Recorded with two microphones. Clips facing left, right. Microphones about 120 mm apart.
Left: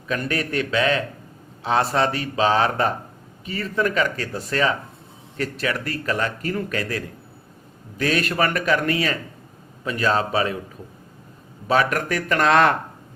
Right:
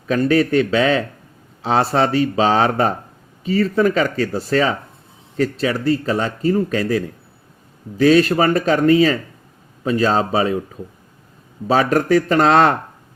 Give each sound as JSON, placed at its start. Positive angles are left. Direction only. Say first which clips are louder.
{"t": 0.1, "sound": "speech", "louder": "right 9 dB", "side_deg": -30}
{"t": 11.7, "sound": "speech", "louder": "right 6 dB", "side_deg": -30}